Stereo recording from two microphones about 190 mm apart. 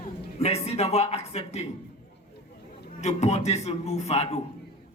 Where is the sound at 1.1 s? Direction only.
35° left (ahead or behind).